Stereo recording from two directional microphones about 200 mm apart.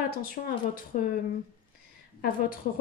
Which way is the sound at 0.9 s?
40° left (ahead or behind).